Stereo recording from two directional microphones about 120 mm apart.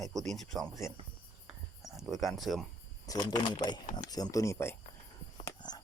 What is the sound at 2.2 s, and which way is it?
Speech, centre (ahead or behind).